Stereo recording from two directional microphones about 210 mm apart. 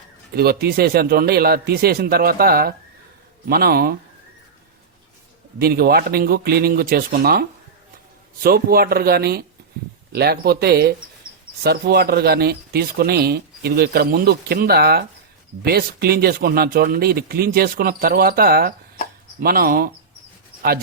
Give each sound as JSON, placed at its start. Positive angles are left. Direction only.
{"t": 0.3, "sound": "speech", "side_deg": -45}
{"t": 5.5, "sound": "speech", "side_deg": -45}
{"t": 8.4, "sound": "speech", "side_deg": -45}